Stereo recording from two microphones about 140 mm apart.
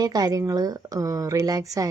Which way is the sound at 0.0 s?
25° right (ahead or behind).